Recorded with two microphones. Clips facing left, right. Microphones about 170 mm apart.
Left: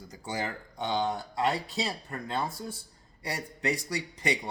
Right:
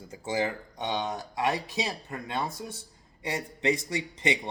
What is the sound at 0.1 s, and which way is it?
Speech, 25° right (ahead or behind).